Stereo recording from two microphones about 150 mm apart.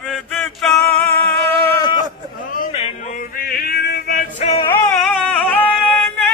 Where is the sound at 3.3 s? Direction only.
85° left.